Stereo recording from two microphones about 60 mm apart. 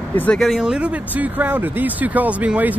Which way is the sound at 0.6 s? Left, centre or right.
Centre.